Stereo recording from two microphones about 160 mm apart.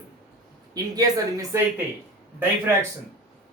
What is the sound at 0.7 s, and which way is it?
A man's voice, 20° right (ahead or behind).